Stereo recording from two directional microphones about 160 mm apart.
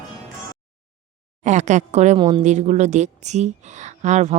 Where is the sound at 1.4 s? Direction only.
45° right (ahead or behind).